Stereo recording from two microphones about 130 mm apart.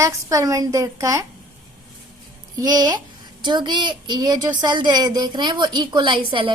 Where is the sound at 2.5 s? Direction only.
30° right (ahead or behind).